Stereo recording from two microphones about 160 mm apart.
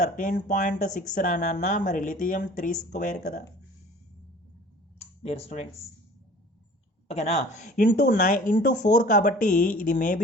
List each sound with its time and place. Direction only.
0.0 s speech: 50° left (ahead or behind)
4.9 s a sound: 40° left (ahead or behind)
7.1 s speech: 45° left (ahead or behind)